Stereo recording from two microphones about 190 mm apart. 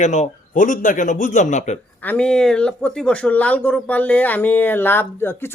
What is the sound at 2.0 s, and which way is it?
Speech, 5° left (ahead or behind).